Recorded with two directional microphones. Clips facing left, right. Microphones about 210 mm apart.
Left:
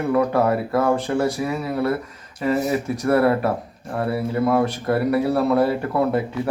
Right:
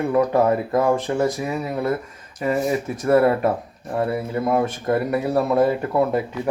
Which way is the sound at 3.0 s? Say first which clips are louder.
Right 2 dB; 15° right (ahead or behind).